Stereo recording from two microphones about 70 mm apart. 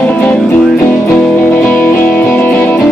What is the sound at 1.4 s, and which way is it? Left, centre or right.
Music, left.